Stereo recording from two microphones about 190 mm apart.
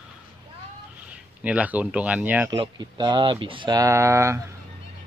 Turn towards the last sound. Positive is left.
turn(degrees=-15)  # may be behind; listen again after turning